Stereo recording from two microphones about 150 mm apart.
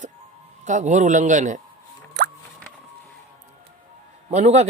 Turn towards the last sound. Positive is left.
turn(degrees=-50)  # may be behind; listen again after turning